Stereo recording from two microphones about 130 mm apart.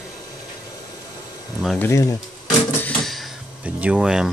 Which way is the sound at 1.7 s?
20° left (ahead or behind).